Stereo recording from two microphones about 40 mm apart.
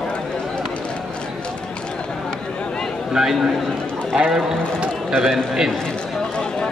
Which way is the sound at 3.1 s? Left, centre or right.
Centre.